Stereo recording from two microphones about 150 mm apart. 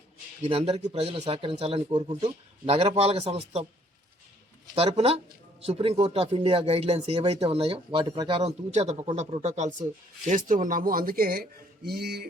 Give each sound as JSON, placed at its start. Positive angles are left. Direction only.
{"t": 0.4, "sound": "speech", "side_deg": -45}
{"t": 1.9, "sound": "speech", "side_deg": -30}
{"t": 2.7, "sound": "speech", "side_deg": -45}
{"t": 4.7, "sound": "speech", "side_deg": -45}
{"t": 8.4, "sound": "speech", "side_deg": -45}